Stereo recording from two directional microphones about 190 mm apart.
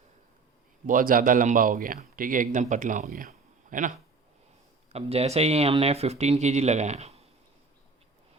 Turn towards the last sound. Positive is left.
turn(degrees=-35)  # may be behind; listen again after turning